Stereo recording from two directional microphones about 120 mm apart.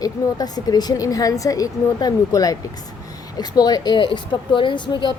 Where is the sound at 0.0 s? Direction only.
30° left (ahead or behind).